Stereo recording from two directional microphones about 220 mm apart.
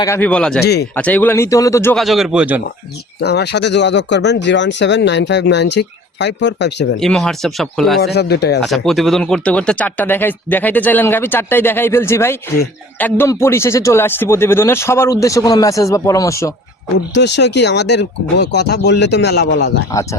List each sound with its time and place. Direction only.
0.0 s speech: 10° left (ahead or behind)
0.6 s speech: 50° left (ahead or behind)
0.9 s speech: 5° left (ahead or behind)
2.0 s speech: centre (ahead or behind)
3.2 s speech: 50° left (ahead or behind)
7.0 s speech: centre (ahead or behind)
8.0 s speech: 50° left (ahead or behind)
8.6 s speech: centre (ahead or behind)
17.2 s speech: 50° left (ahead or behind)
19.9 s speech: 15° left (ahead or behind)